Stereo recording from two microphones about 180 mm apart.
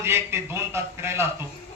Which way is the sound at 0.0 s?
15° right (ahead or behind).